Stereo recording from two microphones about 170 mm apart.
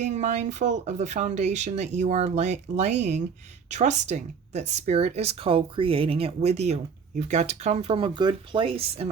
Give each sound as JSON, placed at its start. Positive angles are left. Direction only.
{"t": 0.0, "sound": "speech", "side_deg": -45}